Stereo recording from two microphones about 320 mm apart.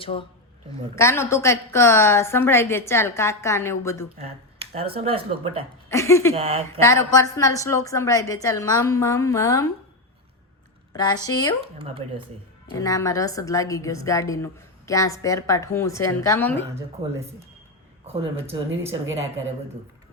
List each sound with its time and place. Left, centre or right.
0.0 s a woman's voice: centre
4.2 s speech: centre
5.9 s a woman's voice: centre
6.3 s speech: centre
6.8 s a woman's voice: centre
10.9 s a woman's voice: centre
11.8 s speech: centre
12.7 s a woman's voice: centre
16.7 s speech: centre
18.0 s speech: centre
18.4 s speech: centre